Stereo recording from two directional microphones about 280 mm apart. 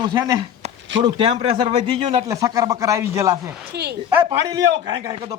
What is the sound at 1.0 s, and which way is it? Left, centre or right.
Speech, centre.